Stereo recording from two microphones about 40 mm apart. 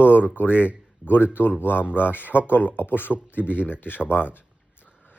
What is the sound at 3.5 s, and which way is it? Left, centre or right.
Speech, left.